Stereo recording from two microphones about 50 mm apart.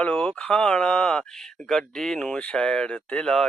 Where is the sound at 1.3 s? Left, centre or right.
Centre.